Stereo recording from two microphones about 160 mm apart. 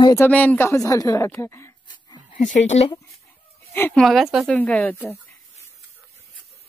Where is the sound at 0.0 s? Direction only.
20° left (ahead or behind).